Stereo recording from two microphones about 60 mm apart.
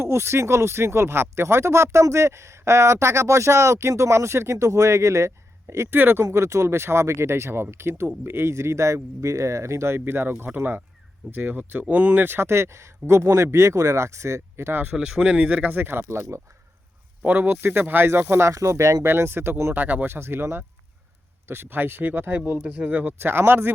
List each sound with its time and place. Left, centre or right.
0.0 s speech: right
6.0 s speech: right
6.3 s speech: right
10.1 s speech: right
14.9 s speech: centre
15.8 s speech: right
17.2 s speech: right
19.0 s speech: right
19.7 s speech: right
22.5 s speech: right